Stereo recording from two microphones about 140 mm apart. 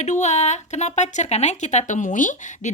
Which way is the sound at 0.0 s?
55° left (ahead or behind).